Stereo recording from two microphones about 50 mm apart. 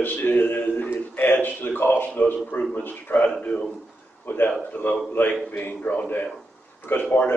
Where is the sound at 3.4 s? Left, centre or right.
Left.